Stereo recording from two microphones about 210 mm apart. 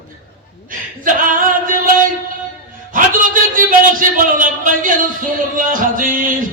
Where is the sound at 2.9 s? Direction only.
40° right (ahead or behind).